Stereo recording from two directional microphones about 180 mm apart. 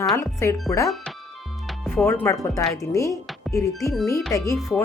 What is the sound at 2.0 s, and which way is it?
Speech, 15° left (ahead or behind).